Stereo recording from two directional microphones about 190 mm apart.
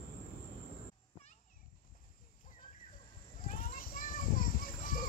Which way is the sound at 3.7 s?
50° left (ahead or behind).